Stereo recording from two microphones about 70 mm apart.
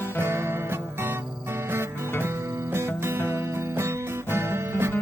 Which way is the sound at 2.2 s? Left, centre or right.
Right.